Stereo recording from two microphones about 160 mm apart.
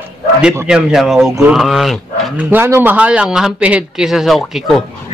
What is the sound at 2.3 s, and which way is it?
Speech, 10° right (ahead or behind).